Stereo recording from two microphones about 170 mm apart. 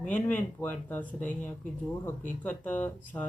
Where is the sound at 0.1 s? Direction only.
10° left (ahead or behind).